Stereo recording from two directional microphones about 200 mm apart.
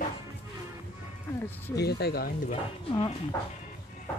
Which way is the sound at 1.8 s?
55° left (ahead or behind).